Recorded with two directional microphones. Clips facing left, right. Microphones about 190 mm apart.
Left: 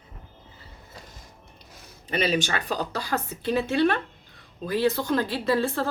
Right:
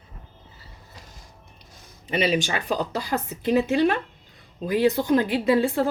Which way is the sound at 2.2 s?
15° right (ahead or behind).